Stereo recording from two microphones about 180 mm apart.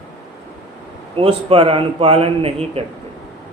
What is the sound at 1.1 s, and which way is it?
Speech, 30° right (ahead or behind).